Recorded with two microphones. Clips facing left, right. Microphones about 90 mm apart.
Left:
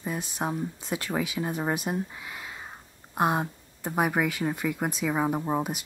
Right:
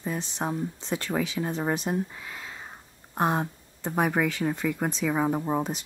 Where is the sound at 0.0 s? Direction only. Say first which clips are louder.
Even; 10° left (ahead or behind).